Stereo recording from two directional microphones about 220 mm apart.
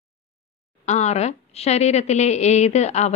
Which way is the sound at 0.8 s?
30° left (ahead or behind).